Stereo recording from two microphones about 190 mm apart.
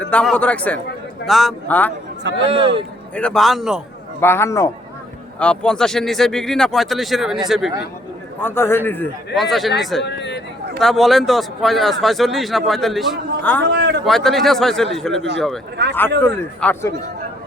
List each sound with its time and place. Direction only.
0.0 s a man's voice: 5° left (ahead or behind)
2.5 s a man's voice: 30° right (ahead or behind)
3.2 s a man's voice: 5° left (ahead or behind)
4.2 s a man's voice: 15° left (ahead or behind)
8.4 s a man's voice: 10° left (ahead or behind)
10.0 s speech: 65° left (ahead or behind)
10.8 s a man's voice: centre (ahead or behind)
13.6 s a man's voice: 65° right (ahead or behind)
14.0 s a man's voice: centre (ahead or behind)